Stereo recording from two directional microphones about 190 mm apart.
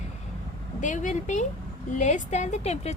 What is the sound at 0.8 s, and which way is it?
A woman's voice, 40° left (ahead or behind).